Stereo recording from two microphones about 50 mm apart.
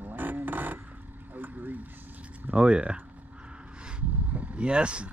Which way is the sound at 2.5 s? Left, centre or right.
Right.